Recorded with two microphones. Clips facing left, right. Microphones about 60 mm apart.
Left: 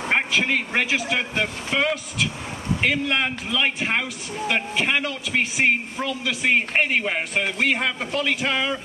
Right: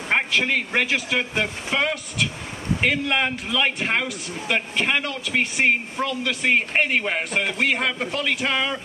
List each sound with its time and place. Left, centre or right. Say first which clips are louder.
0.1 s a man's voice: even; centre